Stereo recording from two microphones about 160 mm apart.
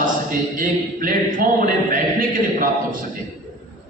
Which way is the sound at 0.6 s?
60° right (ahead or behind).